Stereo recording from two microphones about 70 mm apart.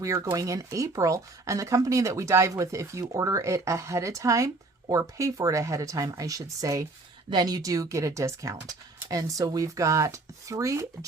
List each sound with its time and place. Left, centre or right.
0.0 s speech: right
7.3 s speech: right